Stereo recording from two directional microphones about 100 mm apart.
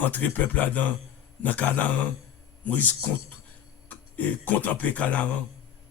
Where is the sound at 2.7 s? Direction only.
15° left (ahead or behind).